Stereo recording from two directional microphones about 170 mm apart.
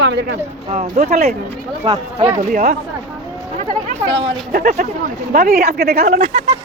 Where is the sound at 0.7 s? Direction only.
40° right (ahead or behind).